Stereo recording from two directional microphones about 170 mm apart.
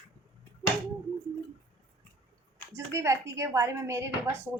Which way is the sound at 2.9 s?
15° right (ahead or behind).